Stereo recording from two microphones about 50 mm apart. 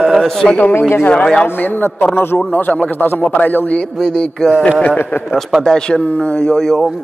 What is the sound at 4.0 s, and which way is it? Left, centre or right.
Speech, centre.